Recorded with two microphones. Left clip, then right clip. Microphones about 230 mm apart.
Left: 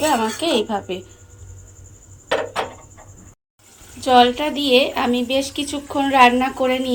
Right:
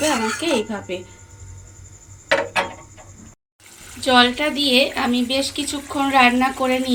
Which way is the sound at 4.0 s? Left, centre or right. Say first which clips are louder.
Left 2 dB; centre.